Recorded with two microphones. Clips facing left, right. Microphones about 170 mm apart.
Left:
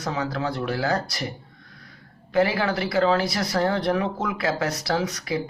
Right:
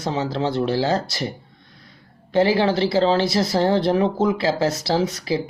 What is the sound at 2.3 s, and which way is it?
Speech, 25° right (ahead or behind).